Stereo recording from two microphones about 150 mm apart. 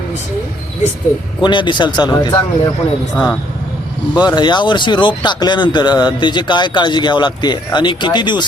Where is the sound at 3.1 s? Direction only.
10° left (ahead or behind).